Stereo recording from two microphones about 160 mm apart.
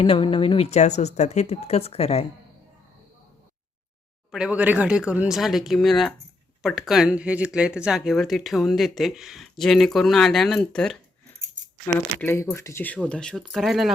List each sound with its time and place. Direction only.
0.0 s speech: 35° left (ahead or behind)
4.3 s speech: 5° right (ahead or behind)
12.2 s speech: 10° left (ahead or behind)